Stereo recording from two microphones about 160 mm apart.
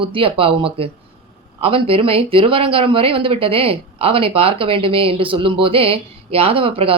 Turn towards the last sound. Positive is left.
turn(degrees=-35)  # may be behind; listen again after turning